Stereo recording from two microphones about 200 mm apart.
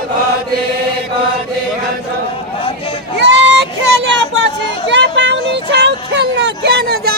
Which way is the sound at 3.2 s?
60° right (ahead or behind).